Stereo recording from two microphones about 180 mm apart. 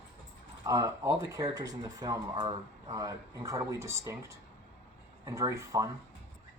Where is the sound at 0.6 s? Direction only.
20° right (ahead or behind).